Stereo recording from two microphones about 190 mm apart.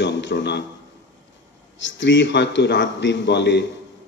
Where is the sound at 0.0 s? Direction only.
70° left (ahead or behind).